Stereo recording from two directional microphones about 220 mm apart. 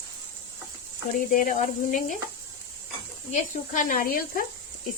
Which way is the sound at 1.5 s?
35° left (ahead or behind).